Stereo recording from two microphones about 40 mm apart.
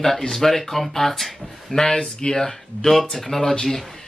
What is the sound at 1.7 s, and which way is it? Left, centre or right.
A man's voice, centre.